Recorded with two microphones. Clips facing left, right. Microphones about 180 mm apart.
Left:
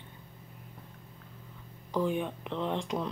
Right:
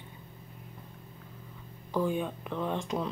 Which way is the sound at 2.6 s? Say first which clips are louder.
Even; 20° left (ahead or behind).